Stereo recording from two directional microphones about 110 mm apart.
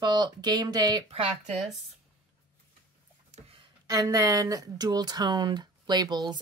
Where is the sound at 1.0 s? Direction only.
60° right (ahead or behind).